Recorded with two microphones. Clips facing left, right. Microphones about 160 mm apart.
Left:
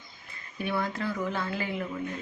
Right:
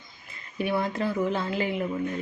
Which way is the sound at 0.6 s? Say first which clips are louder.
Right 4 dB; 20° right (ahead or behind).